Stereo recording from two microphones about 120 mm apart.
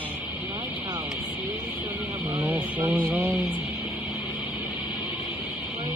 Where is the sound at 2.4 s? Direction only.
15° right (ahead or behind).